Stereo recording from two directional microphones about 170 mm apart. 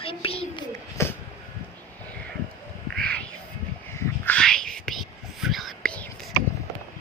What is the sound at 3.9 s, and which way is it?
Whispering, 15° left (ahead or behind).